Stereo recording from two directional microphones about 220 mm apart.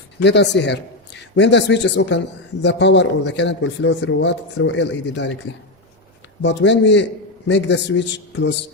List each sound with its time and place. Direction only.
0.2 s a man's voice: 50° left (ahead or behind)